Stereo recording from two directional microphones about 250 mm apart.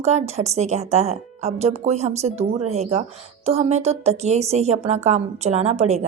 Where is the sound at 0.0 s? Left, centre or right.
Right.